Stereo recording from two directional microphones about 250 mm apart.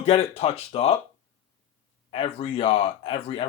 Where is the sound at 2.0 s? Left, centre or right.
Left.